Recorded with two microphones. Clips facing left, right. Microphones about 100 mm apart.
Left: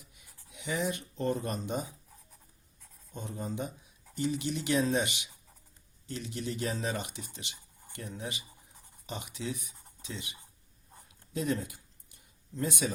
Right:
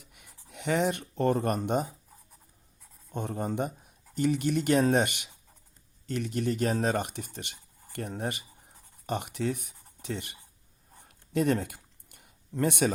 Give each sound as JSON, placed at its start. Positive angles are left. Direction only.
{"t": 0.0, "sound": "speech", "side_deg": -60}
{"t": 3.1, "sound": "speech", "side_deg": -60}
{"t": 11.0, "sound": "a sound", "side_deg": -65}